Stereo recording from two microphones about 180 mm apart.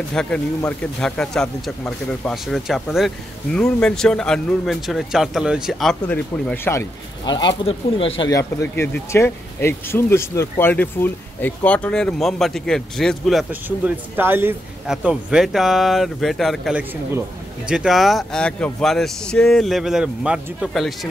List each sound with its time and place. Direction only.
0.1 s speech: 5° left (ahead or behind)
6.5 s speech: 10° left (ahead or behind)
7.2 s speech: 25° left (ahead or behind)
8.3 s speech: 15° left (ahead or behind); by 21.1 s centre (ahead or behind)